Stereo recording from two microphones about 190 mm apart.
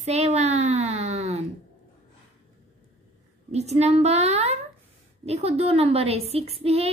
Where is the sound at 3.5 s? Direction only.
35° right (ahead or behind).